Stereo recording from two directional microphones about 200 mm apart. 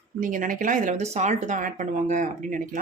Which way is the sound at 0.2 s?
40° right (ahead or behind).